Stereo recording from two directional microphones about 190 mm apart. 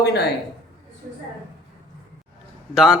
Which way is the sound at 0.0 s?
60° left (ahead or behind).